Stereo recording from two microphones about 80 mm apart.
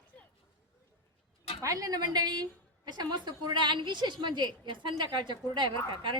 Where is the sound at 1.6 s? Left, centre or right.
Right.